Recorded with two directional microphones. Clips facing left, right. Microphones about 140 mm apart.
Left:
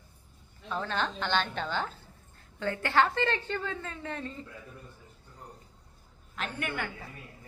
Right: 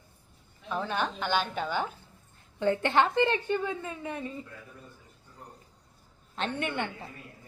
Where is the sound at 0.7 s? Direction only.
15° right (ahead or behind).